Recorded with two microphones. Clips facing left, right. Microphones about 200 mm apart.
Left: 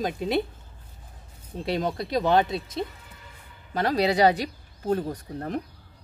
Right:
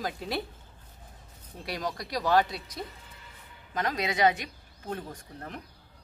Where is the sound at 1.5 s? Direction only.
25° left (ahead or behind).